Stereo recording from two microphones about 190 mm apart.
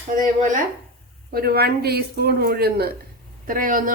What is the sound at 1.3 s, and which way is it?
Speech, 55° right (ahead or behind).